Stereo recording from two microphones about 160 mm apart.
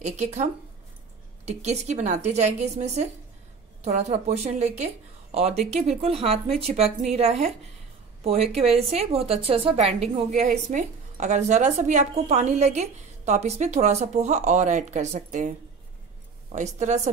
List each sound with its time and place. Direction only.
0.0 s a woman's voice: 45° right (ahead or behind)
16.5 s a woman's voice: 50° right (ahead or behind)